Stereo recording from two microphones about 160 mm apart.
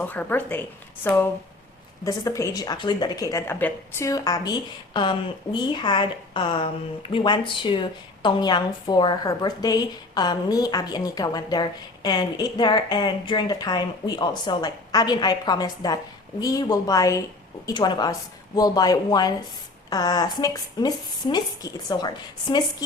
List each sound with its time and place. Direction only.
0.0 s a woman's voice: 10° left (ahead or behind); by 22.6 s 25° left (ahead or behind)